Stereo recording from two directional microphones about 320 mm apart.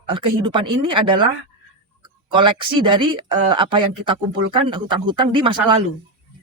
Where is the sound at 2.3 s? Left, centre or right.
Centre.